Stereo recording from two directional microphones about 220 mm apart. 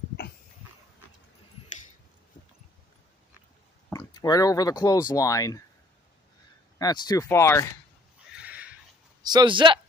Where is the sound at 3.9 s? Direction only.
15° left (ahead or behind).